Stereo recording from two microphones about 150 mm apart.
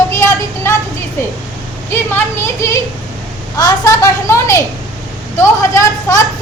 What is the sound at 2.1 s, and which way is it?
A woman's voice, 15° left (ahead or behind).